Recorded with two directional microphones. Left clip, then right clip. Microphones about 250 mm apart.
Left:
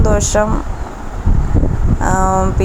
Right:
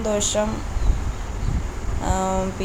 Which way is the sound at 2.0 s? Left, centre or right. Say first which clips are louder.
Left 9 dB; centre.